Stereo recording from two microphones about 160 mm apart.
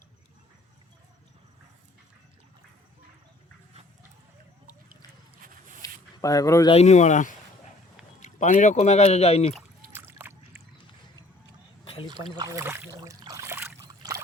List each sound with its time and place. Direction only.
5.8 s a sound: 20° left (ahead or behind)
6.7 s speech: 45° left (ahead or behind)
9.9 s splash: 15° right (ahead or behind)
12.0 s speech: 25° right (ahead or behind)
13.8 s boat: 25° right (ahead or behind)